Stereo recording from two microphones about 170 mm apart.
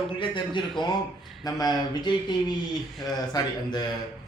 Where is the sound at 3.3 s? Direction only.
25° left (ahead or behind).